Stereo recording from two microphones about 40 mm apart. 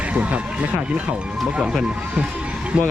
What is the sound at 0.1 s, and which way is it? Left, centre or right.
Speech, right.